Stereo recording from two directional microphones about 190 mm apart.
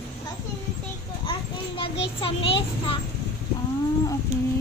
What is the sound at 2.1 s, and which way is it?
Speech, 30° left (ahead or behind).